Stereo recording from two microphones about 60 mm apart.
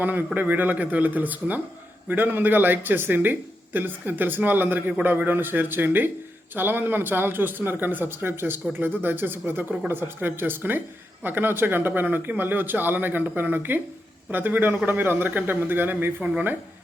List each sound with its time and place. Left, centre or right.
0.0 s a man's voice: right